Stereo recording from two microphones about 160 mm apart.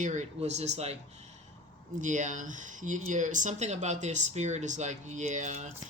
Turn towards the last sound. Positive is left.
turn(degrees=-50)  # may be behind; listen again after turning